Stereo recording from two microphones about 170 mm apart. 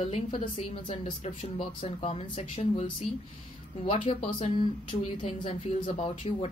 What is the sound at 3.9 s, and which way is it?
Speech, 30° left (ahead or behind).